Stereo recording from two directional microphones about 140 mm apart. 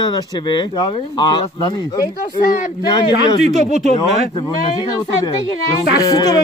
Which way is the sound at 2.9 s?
35° left (ahead or behind).